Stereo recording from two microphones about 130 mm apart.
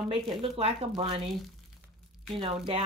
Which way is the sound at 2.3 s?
40° right (ahead or behind).